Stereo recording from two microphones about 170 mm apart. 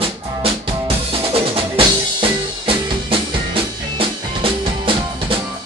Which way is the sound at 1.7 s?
30° right (ahead or behind).